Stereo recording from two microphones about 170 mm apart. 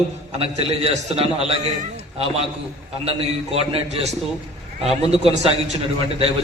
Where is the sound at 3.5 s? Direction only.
35° right (ahead or behind).